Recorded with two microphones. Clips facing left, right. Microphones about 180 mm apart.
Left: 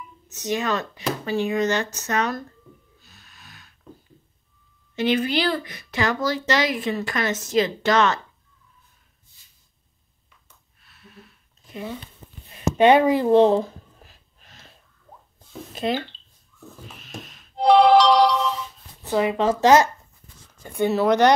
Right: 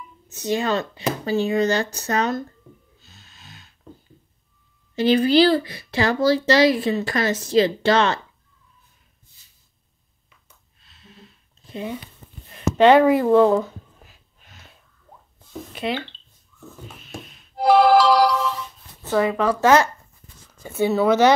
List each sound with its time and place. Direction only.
0.3 s speech: 30° right (ahead or behind)
3.0 s snort: 25° right (ahead or behind)
4.9 s speech: 35° right (ahead or behind)
10.8 s a sound: 25° right (ahead or behind)
12.7 s speech: 15° left (ahead or behind)
13.1 s a sound: 25° left (ahead or behind)
15.3 s plop: 45° left (ahead or behind)
17.0 s music: 90° left
17.6 s music: 5° right (ahead or behind)
19.0 s speech: 20° left (ahead or behind)
20.6 s speech: 5° right (ahead or behind)